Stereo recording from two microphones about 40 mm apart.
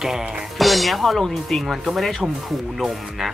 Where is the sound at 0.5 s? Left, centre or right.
Centre.